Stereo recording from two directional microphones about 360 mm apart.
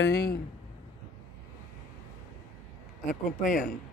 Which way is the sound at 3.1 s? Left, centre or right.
Left.